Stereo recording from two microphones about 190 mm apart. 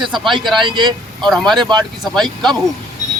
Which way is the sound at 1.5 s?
25° right (ahead or behind).